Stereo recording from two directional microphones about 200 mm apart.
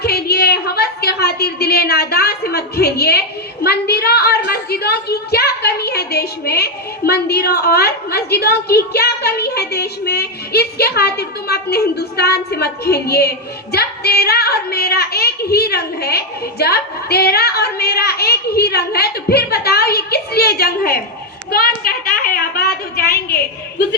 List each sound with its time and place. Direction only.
0.0 s a woman's voice: 50° left (ahead or behind)